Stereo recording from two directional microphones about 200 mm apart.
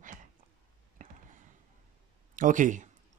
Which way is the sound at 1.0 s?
40° right (ahead or behind).